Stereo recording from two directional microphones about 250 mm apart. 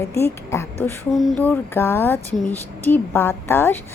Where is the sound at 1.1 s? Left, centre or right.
Centre.